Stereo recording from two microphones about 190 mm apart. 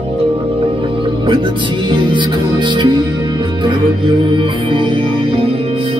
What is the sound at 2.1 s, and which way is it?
Music, 25° right (ahead or behind).